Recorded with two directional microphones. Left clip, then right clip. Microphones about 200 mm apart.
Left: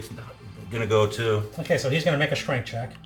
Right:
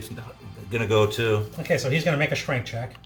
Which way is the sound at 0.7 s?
45° right (ahead or behind).